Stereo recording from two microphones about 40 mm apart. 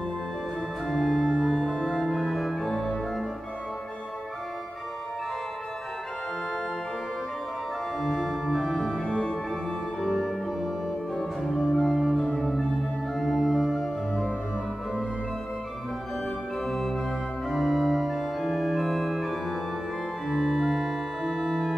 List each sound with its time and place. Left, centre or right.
0.8 s organ: centre
1.4 s music: centre
2.0 s organ: centre
2.6 s music: centre
8.0 s organ: centre
9.0 s music: centre
10.0 s music: centre
13.1 s organ: centre
13.4 s music: centre
16.6 s organ: centre